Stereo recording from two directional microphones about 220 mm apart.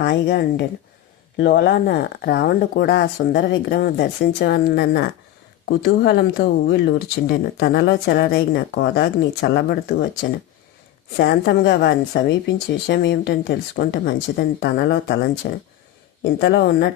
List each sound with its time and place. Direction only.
0.0 s speech: 45° left (ahead or behind)